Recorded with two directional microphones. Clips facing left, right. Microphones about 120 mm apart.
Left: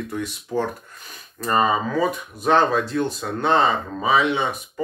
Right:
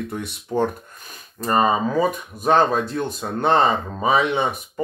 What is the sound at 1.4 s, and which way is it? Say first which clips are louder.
Speech: right 1 dB; 30° right (ahead or behind).